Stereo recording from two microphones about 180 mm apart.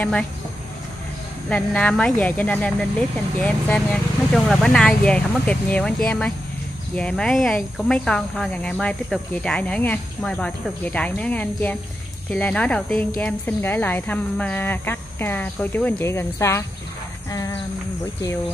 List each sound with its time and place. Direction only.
0.0 s speech: 5° left (ahead or behind)
1.5 s a woman's voice: 5° left (ahead or behind)
17.3 s a sound: 20° left (ahead or behind)